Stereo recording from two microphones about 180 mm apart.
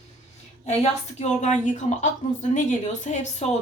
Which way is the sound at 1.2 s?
40° left (ahead or behind).